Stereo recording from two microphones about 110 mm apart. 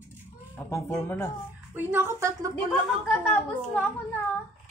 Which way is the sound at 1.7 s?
20° right (ahead or behind).